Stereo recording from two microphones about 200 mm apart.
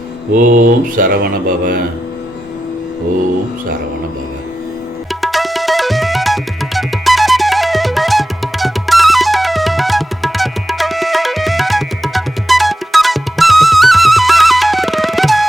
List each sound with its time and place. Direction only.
0.3 s mantra: 40° right (ahead or behind)
5.2 s music: centre (ahead or behind)